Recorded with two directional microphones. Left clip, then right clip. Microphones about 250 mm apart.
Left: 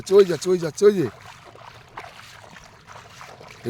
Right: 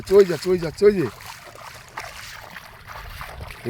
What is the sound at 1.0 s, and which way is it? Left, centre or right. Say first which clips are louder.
Splash: right 1 dB; right.